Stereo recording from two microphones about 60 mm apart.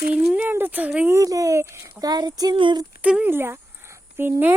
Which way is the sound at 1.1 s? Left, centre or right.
Right.